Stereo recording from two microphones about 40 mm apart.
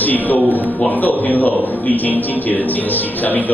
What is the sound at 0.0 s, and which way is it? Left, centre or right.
A man's voice, left.